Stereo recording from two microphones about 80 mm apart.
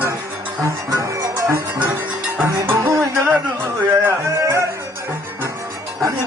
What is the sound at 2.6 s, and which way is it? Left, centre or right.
Music, right.